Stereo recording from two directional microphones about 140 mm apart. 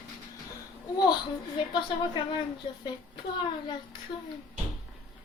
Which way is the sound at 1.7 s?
35° left (ahead or behind).